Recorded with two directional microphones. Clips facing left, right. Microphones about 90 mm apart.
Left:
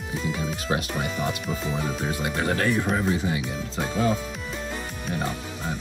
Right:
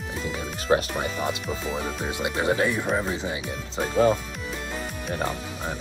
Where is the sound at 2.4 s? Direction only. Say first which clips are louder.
Right 3 dB; 15° right (ahead or behind).